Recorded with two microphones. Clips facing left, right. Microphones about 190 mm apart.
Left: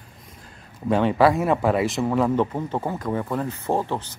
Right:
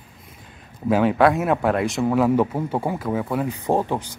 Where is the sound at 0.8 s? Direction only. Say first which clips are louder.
Right 1 dB; centre (ahead or behind).